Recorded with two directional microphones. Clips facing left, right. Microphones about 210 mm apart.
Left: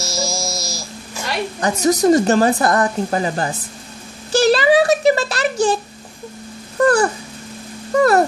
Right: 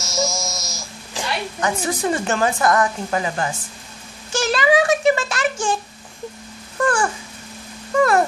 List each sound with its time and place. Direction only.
0.0 s a sound: 35° left (ahead or behind)
1.6 s speech: 40° left (ahead or behind)
6.8 s speech: 40° left (ahead or behind)